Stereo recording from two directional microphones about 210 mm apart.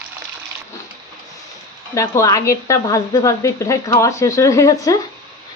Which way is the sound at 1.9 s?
15° left (ahead or behind).